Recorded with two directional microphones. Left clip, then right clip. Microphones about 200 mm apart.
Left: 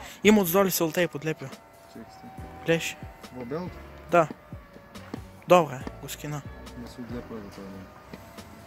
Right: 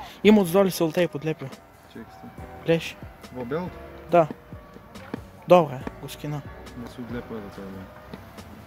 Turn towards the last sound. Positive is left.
turn(degrees=0)  # may be behind; listen again after turning